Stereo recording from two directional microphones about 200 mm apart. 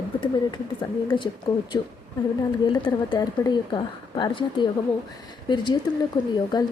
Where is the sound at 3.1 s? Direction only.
20° left (ahead or behind).